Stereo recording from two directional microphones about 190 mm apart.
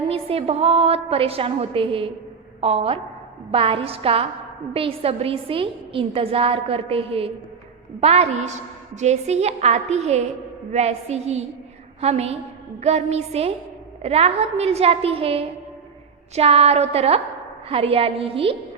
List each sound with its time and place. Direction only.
0.1 s a woman's voice: 30° right (ahead or behind)